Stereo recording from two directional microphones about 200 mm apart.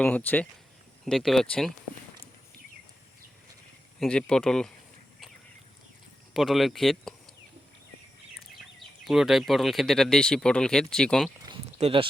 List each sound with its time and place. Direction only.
0.0 s speech: 5° left (ahead or behind)
4.0 s speech: 5° left (ahead or behind)
6.3 s speech: centre (ahead or behind)
9.0 s speech: centre (ahead or behind)
11.4 s a sound: 25° right (ahead or behind)